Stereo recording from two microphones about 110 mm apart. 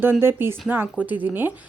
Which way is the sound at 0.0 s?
20° right (ahead or behind).